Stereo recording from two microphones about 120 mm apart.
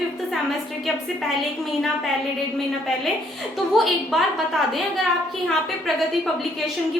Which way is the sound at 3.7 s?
Centre (ahead or behind).